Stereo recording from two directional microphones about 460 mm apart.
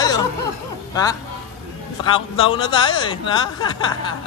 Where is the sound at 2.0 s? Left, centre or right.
Centre.